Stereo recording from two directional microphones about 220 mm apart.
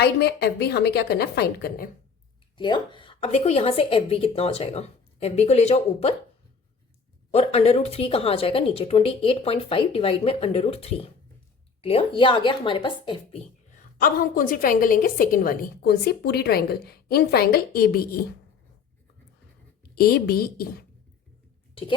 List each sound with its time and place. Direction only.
0.0 s a woman's voice: 50° left (ahead or behind)
2.6 s a woman's voice: 20° left (ahead or behind)
7.3 s a woman's voice: 25° left (ahead or behind)
13.7 s a woman's voice: 40° left (ahead or behind)
20.0 s a woman's voice: 45° left (ahead or behind)